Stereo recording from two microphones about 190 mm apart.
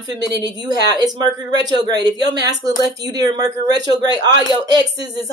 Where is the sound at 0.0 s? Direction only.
20° right (ahead or behind).